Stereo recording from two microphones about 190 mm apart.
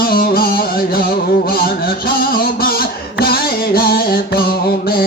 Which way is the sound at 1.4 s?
50° left (ahead or behind).